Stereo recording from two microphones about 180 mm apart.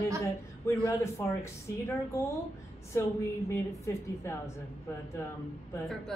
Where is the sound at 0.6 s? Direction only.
15° left (ahead or behind).